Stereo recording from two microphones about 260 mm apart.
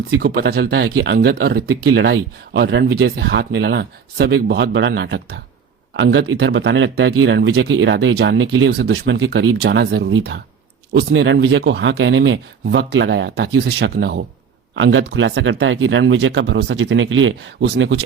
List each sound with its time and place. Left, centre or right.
0.1 s speech: right